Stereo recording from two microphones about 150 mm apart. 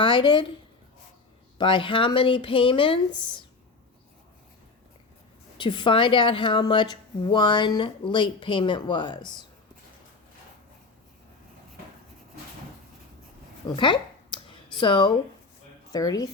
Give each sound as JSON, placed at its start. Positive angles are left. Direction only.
{"t": 0.0, "sound": "speech", "side_deg": 35}
{"t": 1.5, "sound": "speech", "side_deg": 35}
{"t": 5.5, "sound": "speech", "side_deg": 30}
{"t": 13.7, "sound": "speech", "side_deg": 30}